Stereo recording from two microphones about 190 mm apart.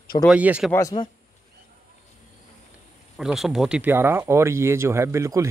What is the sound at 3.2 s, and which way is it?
Speech, centre (ahead or behind).